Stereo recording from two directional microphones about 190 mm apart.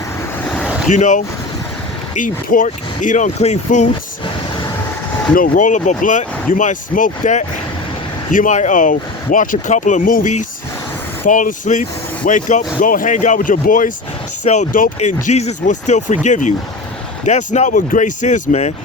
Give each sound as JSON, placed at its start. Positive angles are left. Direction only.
{"t": 0.4, "sound": "waves", "side_deg": 5}
{"t": 0.9, "sound": "speech", "side_deg": 40}
{"t": 5.3, "sound": "speech", "side_deg": 45}